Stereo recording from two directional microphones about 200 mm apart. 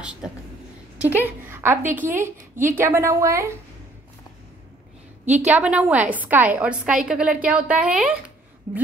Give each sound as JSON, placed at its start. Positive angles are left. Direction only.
{"t": 0.0, "sound": "a woman's voice", "side_deg": -5}
{"t": 5.2, "sound": "a woman's voice", "side_deg": -35}
{"t": 5.5, "sound": "a woman's voice", "side_deg": -5}